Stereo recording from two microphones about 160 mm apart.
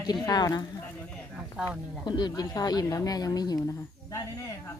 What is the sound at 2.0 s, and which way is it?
Speech, 25° left (ahead or behind).